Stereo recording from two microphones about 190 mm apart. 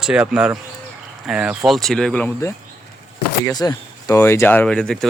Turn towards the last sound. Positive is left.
turn(degrees=0)  # may be behind; listen again after turning